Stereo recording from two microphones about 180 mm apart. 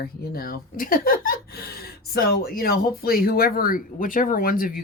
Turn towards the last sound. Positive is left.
turn(degrees=50)  # may be behind; listen again after turning